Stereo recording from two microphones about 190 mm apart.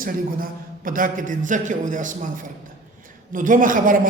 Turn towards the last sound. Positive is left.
turn(degrees=-45)  # may be behind; listen again after turning